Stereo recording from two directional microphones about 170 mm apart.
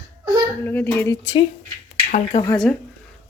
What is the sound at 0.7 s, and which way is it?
Speech, 10° left (ahead or behind).